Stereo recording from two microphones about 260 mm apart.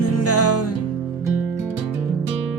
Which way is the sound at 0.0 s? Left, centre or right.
Left.